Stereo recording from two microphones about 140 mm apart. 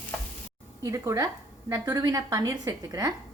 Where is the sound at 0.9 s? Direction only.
25° right (ahead or behind).